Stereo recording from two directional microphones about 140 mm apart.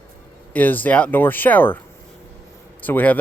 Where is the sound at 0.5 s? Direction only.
10° left (ahead or behind).